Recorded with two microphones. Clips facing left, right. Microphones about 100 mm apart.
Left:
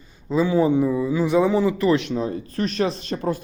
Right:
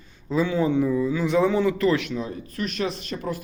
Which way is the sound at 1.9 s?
35° left (ahead or behind).